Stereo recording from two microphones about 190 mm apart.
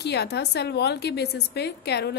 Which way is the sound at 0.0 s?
60° left (ahead or behind).